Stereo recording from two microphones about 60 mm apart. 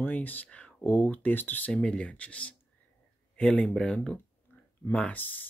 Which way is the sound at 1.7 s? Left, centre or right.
Centre.